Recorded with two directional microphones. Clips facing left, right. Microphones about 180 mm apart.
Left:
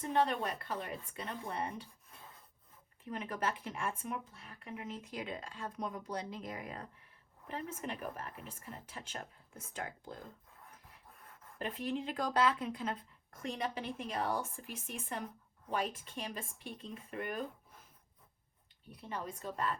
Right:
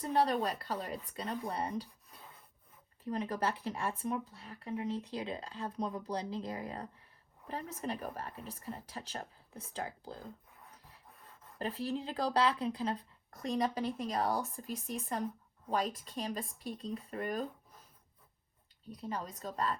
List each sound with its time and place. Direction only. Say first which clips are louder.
0.0 s speech: right 2 dB; 35° right (ahead or behind)
3.0 s speech: right 3 dB; 35° right (ahead or behind)
11.2 s speech: right 2 dB; 30° right (ahead or behind)
19.0 s speech: right 2 dB; 40° right (ahead or behind)